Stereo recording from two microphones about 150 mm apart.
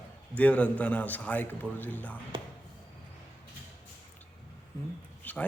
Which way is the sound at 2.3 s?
35° right (ahead or behind).